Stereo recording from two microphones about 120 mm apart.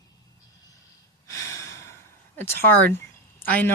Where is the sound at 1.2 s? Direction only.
25° left (ahead or behind).